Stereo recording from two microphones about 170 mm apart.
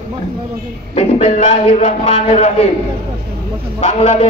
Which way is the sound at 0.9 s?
35° left (ahead or behind).